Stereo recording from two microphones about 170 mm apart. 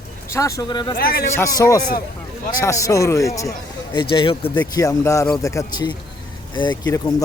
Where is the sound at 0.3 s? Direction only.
20° left (ahead or behind).